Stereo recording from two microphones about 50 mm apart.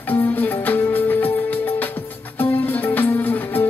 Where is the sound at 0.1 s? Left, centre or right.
Left.